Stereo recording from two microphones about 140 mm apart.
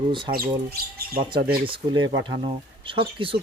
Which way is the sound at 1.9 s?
35° right (ahead or behind).